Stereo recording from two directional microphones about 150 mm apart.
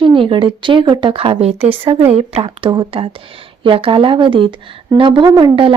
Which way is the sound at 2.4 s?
30° right (ahead or behind).